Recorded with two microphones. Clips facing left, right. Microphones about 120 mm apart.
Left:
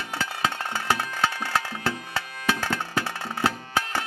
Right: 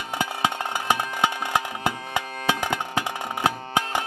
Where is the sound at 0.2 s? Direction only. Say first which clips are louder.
Right 3 dB; 15° right (ahead or behind).